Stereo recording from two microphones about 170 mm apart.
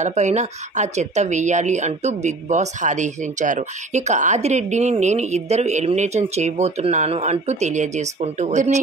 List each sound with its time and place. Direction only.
0.0 s speech: 45° right (ahead or behind)